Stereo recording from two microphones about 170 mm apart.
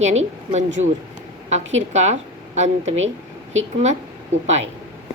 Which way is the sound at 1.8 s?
40° right (ahead or behind).